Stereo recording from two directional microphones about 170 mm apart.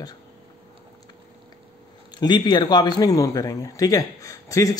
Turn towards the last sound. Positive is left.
turn(degrees=20)  # may be behind; listen again after turning